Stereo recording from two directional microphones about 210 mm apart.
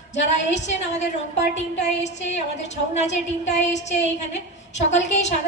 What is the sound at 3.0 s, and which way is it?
A woman's voice, 30° left (ahead or behind).